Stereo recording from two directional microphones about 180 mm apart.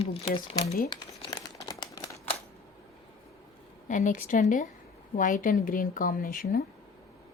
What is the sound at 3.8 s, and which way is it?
A woman's voice, 45° left (ahead or behind).